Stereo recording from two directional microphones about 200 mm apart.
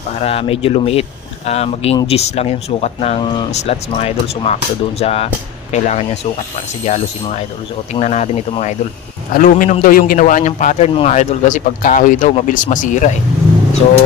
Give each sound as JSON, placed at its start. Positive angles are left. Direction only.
{"t": 0.2, "sound": "speech", "side_deg": 30}